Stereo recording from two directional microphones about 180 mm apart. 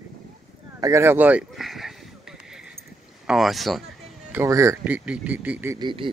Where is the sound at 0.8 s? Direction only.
15° right (ahead or behind).